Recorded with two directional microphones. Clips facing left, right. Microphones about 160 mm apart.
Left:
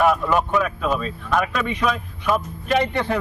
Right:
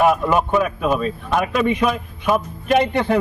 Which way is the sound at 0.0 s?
15° right (ahead or behind).